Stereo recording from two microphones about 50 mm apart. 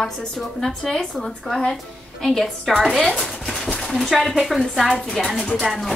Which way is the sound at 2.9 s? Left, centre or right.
Centre.